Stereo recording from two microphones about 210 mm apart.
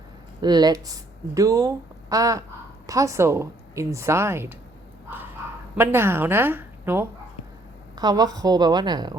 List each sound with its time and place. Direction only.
0.4 s speech: 20° right (ahead or behind)
5.7 s a woman's voice: 10° right (ahead or behind)